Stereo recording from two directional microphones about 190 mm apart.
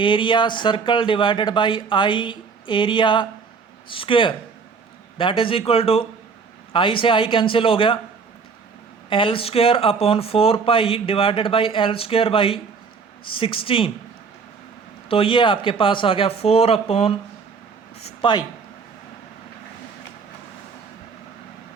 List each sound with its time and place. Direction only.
0.0 s speech: 25° left (ahead or behind)
9.0 s speech: 25° left (ahead or behind)
15.1 s speech: 25° left (ahead or behind)